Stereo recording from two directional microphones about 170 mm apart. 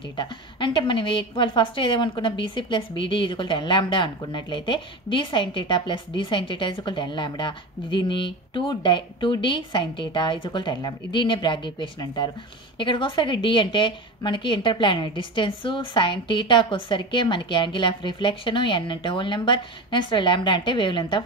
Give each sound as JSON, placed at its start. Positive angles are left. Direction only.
{"t": 0.2, "sound": "a woman's voice", "side_deg": 30}